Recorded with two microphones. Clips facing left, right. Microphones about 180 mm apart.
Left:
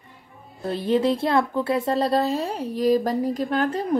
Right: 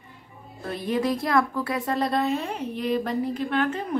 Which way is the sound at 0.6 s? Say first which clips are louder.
Left 4 dB; 30° left (ahead or behind).